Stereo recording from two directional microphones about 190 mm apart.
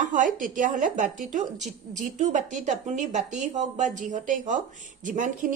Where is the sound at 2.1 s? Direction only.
40° right (ahead or behind).